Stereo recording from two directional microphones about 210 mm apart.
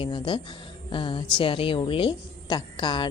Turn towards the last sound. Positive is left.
turn(degrees=20)  # may be behind; listen again after turning